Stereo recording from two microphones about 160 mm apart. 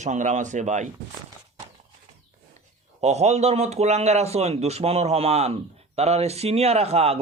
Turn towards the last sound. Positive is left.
turn(degrees=-40)  # may be behind; listen again after turning